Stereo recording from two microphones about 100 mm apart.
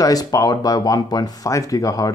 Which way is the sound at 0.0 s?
35° left (ahead or behind).